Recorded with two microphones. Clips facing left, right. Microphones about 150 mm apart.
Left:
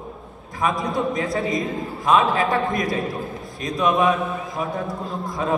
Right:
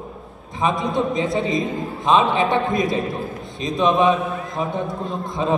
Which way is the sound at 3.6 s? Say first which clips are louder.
Right 3 dB; 20° right (ahead or behind).